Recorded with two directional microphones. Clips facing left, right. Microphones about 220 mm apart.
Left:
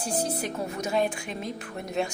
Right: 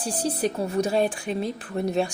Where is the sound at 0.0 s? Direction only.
35° right (ahead or behind).